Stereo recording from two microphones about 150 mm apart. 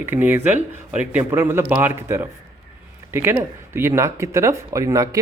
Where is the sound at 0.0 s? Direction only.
15° right (ahead or behind).